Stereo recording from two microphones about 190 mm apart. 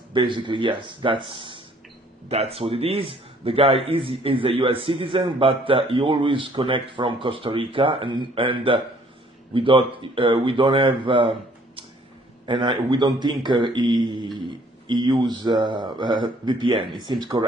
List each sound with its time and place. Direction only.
0.1 s a man's voice: 25° right (ahead or behind)
12.5 s a man's voice: 25° right (ahead or behind)